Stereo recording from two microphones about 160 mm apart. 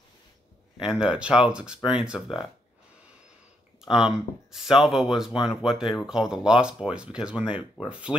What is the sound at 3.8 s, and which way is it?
Speech, 5° right (ahead or behind).